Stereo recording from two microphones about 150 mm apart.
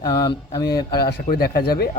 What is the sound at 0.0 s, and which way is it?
Mantra, 25° left (ahead or behind).